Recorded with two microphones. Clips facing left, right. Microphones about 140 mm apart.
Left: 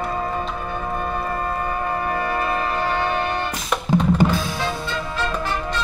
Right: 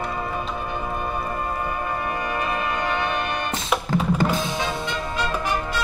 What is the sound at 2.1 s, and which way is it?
Brass instrument, 35° left (ahead or behind).